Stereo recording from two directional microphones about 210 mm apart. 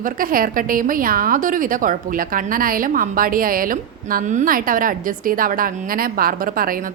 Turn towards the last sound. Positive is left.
turn(degrees=-45)  # may be behind; listen again after turning